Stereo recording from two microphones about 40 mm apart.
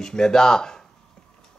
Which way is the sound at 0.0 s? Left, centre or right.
Centre.